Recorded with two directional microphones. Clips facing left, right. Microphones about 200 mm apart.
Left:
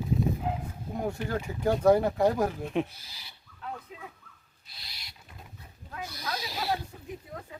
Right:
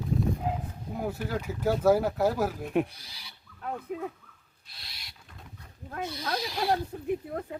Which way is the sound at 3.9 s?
55° right (ahead or behind).